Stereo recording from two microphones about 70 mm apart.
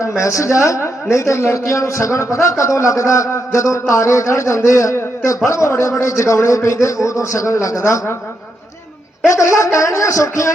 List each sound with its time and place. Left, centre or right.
0.2 s a man's voice: left
9.2 s a man's voice: left